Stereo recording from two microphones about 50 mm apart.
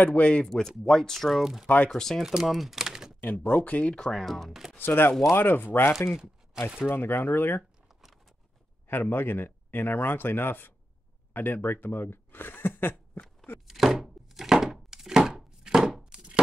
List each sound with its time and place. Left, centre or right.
0.0 s speech: left
0.5 s speech: centre
1.4 s speech: centre
2.0 s speech: centre
2.2 s typing: centre
3.3 s speech: left
3.9 s speech: centre
4.7 s speech: left
5.9 s speech: centre
6.9 s speech: left
9.1 s speech: left
13.7 s chopping: centre